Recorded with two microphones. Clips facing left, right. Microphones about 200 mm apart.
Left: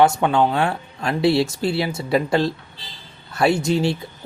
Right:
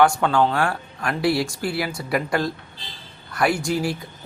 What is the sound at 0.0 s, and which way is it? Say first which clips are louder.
Speech: left 1 dB; 20° left (ahead or behind).